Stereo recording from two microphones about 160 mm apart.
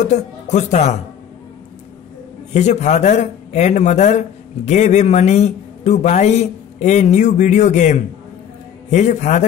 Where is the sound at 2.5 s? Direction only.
45° left (ahead or behind).